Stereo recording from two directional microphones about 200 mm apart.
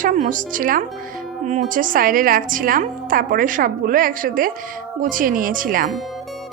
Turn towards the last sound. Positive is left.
turn(degrees=-45)  # may be behind; listen again after turning